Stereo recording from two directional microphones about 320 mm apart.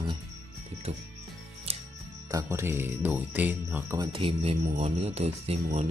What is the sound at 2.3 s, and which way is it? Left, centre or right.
Speech, centre.